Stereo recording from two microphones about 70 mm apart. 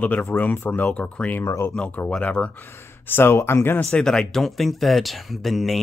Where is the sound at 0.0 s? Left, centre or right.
Left.